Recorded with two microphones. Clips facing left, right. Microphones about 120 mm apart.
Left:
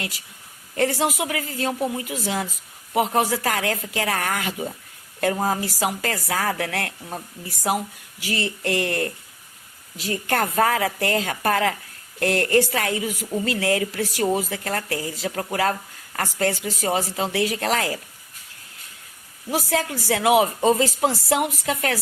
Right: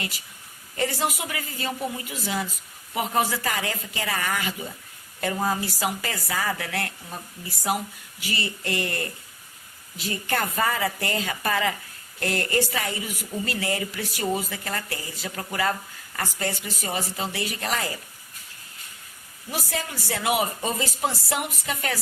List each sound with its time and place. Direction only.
0.8 s a woman's voice: 75° left (ahead or behind)
8.2 s a woman's voice: 90° left; by 9.1 s 70° left (ahead or behind)
10.0 s a woman's voice: 80° left
19.5 s speech: 85° left